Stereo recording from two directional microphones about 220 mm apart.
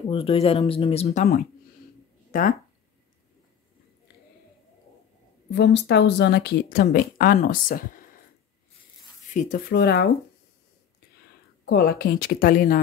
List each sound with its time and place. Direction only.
0.1 s speech: 25° left (ahead or behind)
5.5 s speech: 50° left (ahead or behind)
9.3 s speech: 35° left (ahead or behind)
11.6 s speech: 45° left (ahead or behind)